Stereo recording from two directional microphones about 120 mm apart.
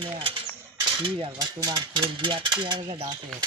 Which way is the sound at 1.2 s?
35° right (ahead or behind).